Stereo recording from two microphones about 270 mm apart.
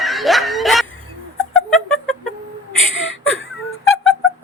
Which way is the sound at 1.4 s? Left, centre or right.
Centre.